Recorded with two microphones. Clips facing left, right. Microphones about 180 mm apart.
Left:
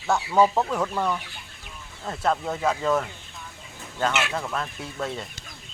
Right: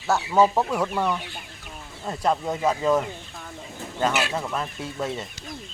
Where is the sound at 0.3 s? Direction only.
15° right (ahead or behind).